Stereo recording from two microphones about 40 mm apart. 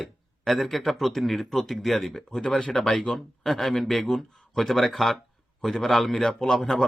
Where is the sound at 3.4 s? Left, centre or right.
Centre.